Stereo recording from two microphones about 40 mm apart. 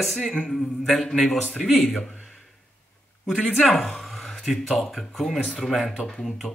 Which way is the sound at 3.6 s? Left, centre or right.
Centre.